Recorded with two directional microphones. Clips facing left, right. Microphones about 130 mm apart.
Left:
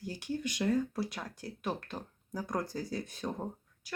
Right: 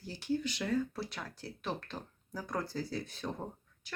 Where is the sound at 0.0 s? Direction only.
15° left (ahead or behind).